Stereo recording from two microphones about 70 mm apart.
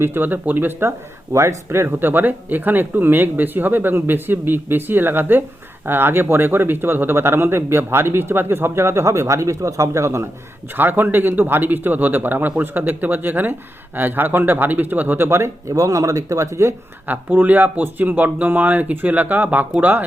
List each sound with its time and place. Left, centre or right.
0.0 s a man's voice: right
1.3 s a man's voice: right
10.8 s a man's voice: right
15.3 s speech: right
15.7 s a man's voice: right
17.1 s a man's voice: right